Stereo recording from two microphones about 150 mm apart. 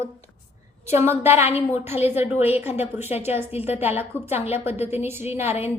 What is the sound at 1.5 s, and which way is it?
A woman's voice, 45° left (ahead or behind).